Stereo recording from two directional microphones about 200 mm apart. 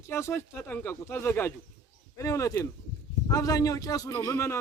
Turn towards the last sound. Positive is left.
turn(degrees=15)  # may be behind; listen again after turning